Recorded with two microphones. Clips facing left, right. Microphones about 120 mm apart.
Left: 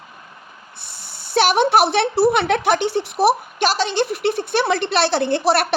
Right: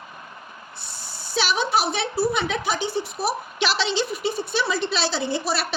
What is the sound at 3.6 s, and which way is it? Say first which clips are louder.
Speech: left 5 dB; 45° left (ahead or behind).